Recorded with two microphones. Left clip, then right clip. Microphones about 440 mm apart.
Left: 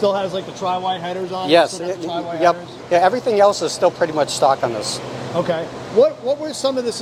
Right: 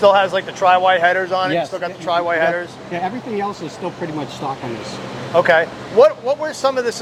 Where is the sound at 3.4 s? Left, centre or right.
Left.